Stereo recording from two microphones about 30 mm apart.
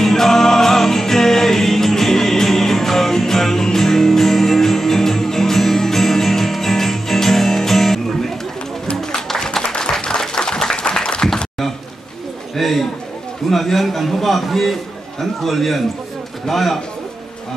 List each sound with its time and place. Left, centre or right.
0.0 s music: centre
9.6 s applause: left
12.5 s a sound: centre
13.5 s a man's voice: centre